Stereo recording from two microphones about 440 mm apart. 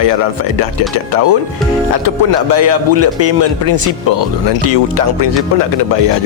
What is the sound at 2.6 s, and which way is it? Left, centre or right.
Speech, right.